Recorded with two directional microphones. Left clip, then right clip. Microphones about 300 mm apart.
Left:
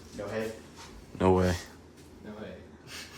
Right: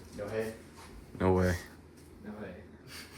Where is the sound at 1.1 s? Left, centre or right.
Centre.